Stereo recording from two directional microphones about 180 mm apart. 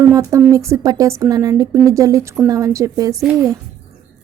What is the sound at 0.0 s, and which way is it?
A woman's voice, 20° right (ahead or behind).